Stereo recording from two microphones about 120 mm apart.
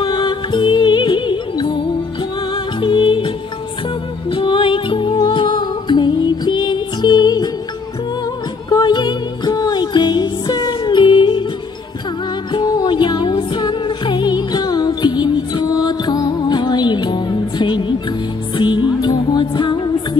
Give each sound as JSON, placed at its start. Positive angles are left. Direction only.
{"t": 0.0, "sound": "music", "side_deg": 40}
{"t": 4.3, "sound": "music", "side_deg": 45}
{"t": 8.6, "sound": "music", "side_deg": 35}
{"t": 12.5, "sound": "music", "side_deg": 35}